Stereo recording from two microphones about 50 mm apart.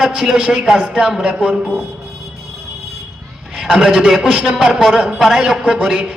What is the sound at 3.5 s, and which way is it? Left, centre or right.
A man's voice, centre.